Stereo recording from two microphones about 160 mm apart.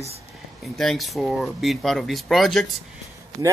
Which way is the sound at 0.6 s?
Centre (ahead or behind).